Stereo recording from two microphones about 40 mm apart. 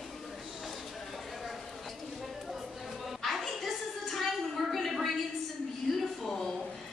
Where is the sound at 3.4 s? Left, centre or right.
Centre.